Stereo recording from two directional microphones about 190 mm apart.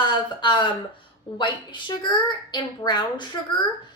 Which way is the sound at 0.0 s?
25° left (ahead or behind).